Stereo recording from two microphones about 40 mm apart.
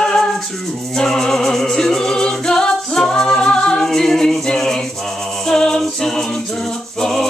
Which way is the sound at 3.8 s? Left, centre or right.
Centre.